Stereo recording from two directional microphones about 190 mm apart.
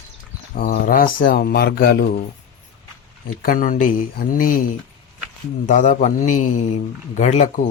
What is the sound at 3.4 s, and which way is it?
A man's voice, 45° left (ahead or behind).